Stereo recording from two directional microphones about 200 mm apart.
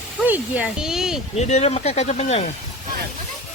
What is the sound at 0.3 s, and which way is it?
Speech, 5° right (ahead or behind).